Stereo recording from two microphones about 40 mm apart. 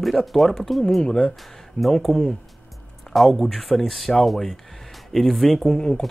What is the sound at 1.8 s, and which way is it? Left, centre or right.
Speech, centre.